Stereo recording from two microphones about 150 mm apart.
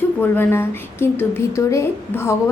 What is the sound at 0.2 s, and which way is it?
A woman's voice, 15° left (ahead or behind).